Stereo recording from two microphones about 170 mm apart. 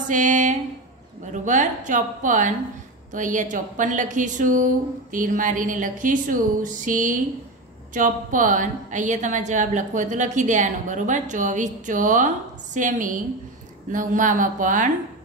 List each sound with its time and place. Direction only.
0.1 s a woman's voice: 45° right (ahead or behind)